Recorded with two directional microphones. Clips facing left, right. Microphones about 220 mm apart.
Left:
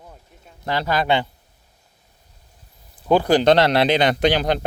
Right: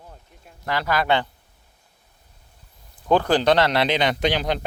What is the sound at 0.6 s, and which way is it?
Speech, 30° left (ahead or behind).